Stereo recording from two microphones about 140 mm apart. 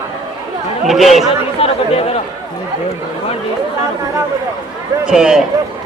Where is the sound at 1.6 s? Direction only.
45° left (ahead or behind).